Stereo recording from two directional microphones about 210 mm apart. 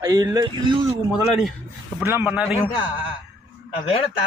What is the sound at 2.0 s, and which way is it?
Speech, 10° right (ahead or behind).